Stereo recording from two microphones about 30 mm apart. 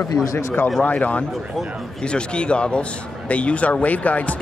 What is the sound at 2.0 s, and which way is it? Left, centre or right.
Speech, left.